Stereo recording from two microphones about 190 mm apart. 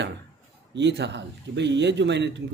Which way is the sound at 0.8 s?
65° right (ahead or behind).